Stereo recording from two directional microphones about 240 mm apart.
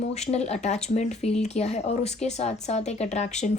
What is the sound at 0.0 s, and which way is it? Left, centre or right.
Speech, left.